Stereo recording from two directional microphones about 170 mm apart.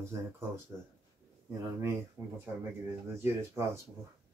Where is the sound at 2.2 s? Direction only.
20° right (ahead or behind).